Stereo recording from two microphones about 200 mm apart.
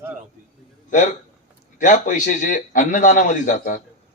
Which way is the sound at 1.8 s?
40° left (ahead or behind).